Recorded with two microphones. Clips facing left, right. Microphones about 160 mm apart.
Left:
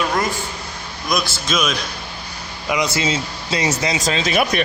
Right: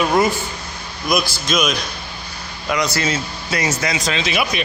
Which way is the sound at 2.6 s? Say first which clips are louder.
Even; 20° left (ahead or behind).